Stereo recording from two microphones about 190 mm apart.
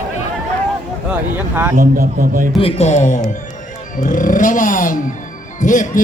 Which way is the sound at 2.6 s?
30° left (ahead or behind).